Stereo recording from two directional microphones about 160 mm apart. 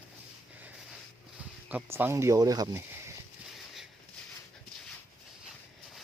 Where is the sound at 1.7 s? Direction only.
10° right (ahead or behind).